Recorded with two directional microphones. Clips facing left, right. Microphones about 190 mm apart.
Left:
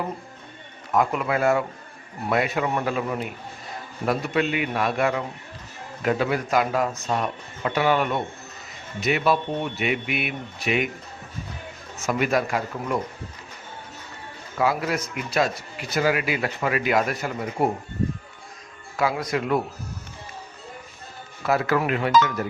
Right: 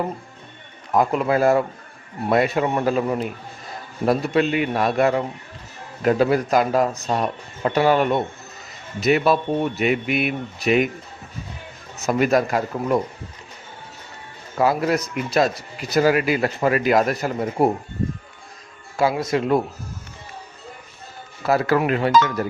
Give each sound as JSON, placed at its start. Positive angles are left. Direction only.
{"t": 0.9, "sound": "speech", "side_deg": -35}
{"t": 12.0, "sound": "speech", "side_deg": -40}
{"t": 14.6, "sound": "speech", "side_deg": -40}
{"t": 18.9, "sound": "speech", "side_deg": -25}
{"t": 21.4, "sound": "speech", "side_deg": -35}